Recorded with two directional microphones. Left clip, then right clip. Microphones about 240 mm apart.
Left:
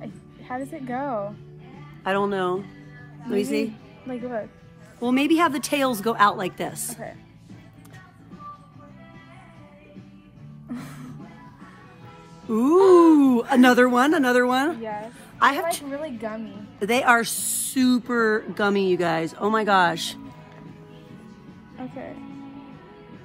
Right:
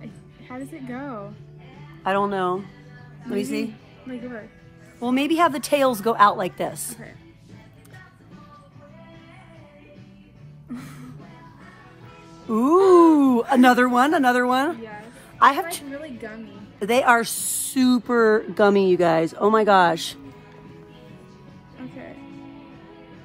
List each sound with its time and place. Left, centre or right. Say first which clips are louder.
0.5 s speech: left 5 dB; left
2.0 s a woman's voice: right 2 dB; centre
4.1 s speech: left 5 dB; left
5.0 s a woman's voice: right 1 dB; centre
10.7 s music: left 1 dB; left
12.4 s a woman's voice: even; centre
16.8 s a woman's voice: right 1 dB; centre